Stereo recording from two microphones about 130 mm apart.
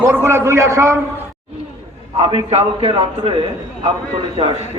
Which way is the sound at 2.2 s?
45° right (ahead or behind).